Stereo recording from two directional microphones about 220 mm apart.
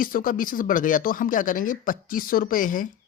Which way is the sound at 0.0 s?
40° left (ahead or behind).